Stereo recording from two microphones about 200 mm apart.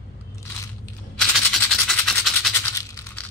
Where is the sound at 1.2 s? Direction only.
Centre (ahead or behind).